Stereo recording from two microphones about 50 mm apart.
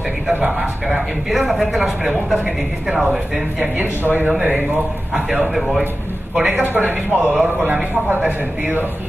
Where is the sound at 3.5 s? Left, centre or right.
Right.